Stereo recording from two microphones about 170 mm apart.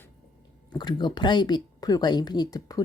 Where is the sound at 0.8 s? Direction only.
25° left (ahead or behind).